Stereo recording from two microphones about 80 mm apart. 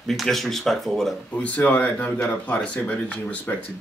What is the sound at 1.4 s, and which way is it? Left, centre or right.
Speech, centre.